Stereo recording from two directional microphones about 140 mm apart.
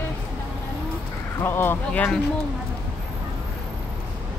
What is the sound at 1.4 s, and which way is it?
Speech, 15° left (ahead or behind).